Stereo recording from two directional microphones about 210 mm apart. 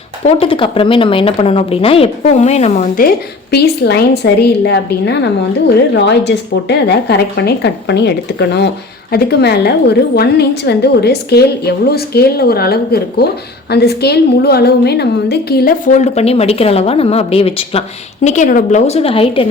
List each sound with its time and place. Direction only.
0.3 s a woman's voice: 25° left (ahead or behind)
3.5 s a woman's voice: 50° left (ahead or behind); by 19.5 s 25° left (ahead or behind)